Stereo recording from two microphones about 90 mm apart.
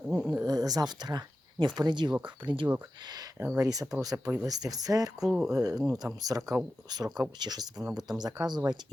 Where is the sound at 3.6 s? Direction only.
45° right (ahead or behind).